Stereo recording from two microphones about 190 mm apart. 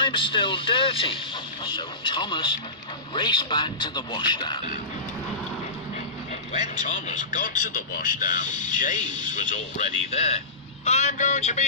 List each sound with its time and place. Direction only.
0.0 s speech: 25° left (ahead or behind)
6.5 s speech: 40° left (ahead or behind)